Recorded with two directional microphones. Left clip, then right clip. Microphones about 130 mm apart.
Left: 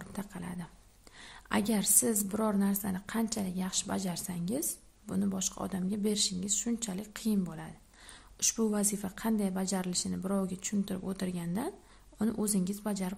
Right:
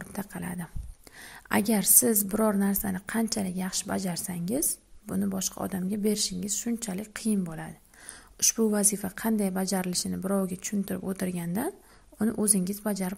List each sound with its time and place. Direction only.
0.0 s a woman's voice: 35° right (ahead or behind)